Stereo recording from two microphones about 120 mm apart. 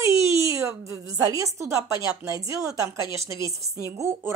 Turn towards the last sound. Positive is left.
turn(degrees=-25)  # may be behind; listen again after turning